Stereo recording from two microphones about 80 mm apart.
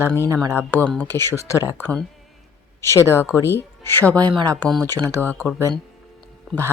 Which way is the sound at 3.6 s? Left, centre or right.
Left.